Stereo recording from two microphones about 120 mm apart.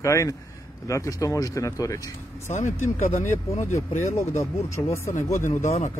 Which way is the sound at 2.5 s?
90° left.